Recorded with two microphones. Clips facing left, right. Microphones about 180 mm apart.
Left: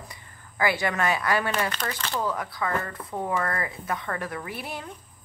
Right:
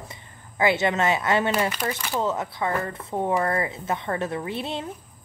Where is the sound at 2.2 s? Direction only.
25° right (ahead or behind).